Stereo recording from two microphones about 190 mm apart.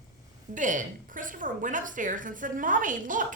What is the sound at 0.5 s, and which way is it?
A woman's voice, 45° right (ahead or behind).